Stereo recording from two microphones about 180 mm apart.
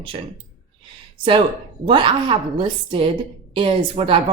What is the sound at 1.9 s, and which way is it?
Speech, 25° right (ahead or behind).